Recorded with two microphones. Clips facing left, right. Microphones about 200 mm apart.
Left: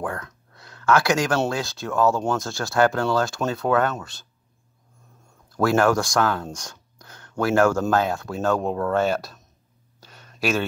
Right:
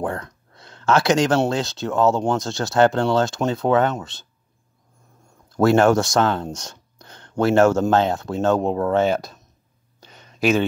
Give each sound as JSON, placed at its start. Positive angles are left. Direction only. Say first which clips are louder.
{"t": 0.0, "sound": "a sound", "louder": "right 4 dB", "side_deg": -25}
{"t": 1.5, "sound": "speech", "louder": "right 4 dB", "side_deg": -20}
{"t": 5.6, "sound": "speech", "louder": "right 4 dB", "side_deg": -25}